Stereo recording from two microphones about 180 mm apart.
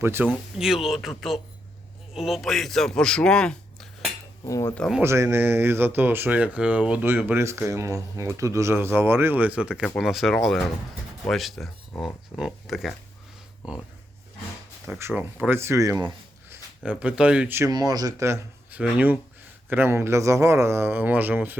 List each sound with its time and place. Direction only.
0.0 s a man's voice: 10° right (ahead or behind); by 4.1 s 5° left (ahead or behind)
4.4 s speech: 15° left (ahead or behind)
4.7 s speech: centre (ahead or behind)
5.0 s speech: 15° right (ahead or behind)
14.8 s speech: 10° right (ahead or behind)
16.5 s speech: 10° right (ahead or behind)
17.7 s speech: 20° right (ahead or behind)